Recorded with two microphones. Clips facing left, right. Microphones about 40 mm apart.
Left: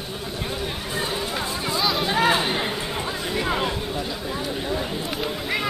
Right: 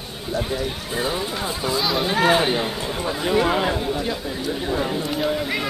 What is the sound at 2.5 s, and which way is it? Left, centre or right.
Speech, centre.